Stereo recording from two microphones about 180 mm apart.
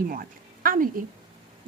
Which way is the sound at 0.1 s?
50° right (ahead or behind).